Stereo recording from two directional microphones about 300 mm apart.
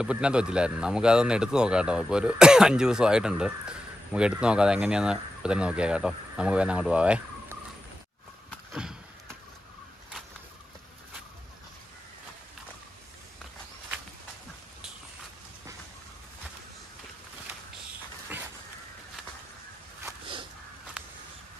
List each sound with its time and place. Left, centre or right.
0.0 s speech: centre
8.4 s slam: centre
18.3 s dog: centre
20.1 s whip: centre